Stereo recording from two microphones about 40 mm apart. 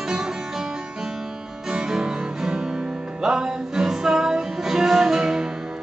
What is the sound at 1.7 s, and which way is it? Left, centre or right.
Music, centre.